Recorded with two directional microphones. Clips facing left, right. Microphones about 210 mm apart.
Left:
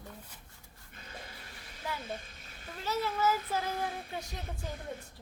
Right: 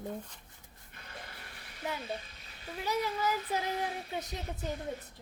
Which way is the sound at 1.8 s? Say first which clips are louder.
Right 2 dB; 20° right (ahead or behind).